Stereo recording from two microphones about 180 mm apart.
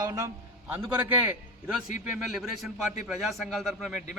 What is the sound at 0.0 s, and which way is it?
A man's voice, 20° right (ahead or behind).